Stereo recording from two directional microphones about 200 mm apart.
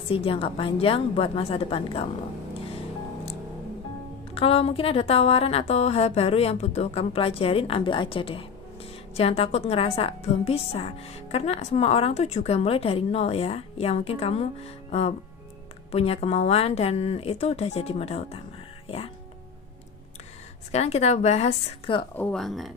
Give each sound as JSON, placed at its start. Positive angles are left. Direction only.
{"t": 0.1, "sound": "a woman's voice", "side_deg": 25}
{"t": 4.4, "sound": "a woman's voice", "side_deg": 30}
{"t": 20.7, "sound": "a woman's voice", "side_deg": 35}
{"t": 22.1, "sound": "speech", "side_deg": 5}